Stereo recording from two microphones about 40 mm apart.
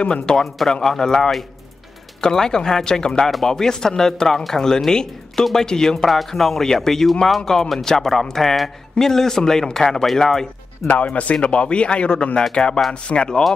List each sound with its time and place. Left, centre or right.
0.3 s speech: centre
3.3 s speech: centre
3.5 s speech: centre
6.0 s speech: centre
10.8 s speech: centre
11.2 s speech: left